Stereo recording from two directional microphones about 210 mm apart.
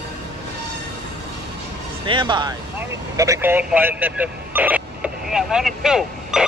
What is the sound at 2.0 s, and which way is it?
Music, 20° right (ahead or behind).